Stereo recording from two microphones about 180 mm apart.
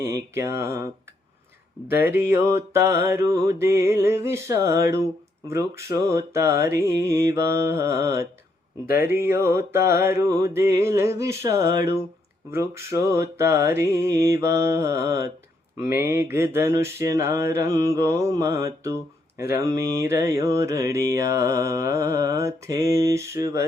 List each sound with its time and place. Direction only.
0.0 s mantra: 15° right (ahead or behind)
2.0 s mantra: 15° right (ahead or behind)